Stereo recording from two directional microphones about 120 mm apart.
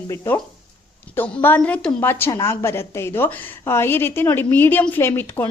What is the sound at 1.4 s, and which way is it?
A woman's voice, 15° left (ahead or behind).